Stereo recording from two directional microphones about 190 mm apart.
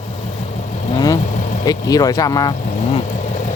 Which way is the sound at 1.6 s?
20° left (ahead or behind).